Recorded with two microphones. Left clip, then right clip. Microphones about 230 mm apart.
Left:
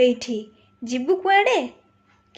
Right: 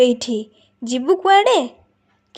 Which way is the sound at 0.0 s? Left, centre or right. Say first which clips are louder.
Right 3 dB; right.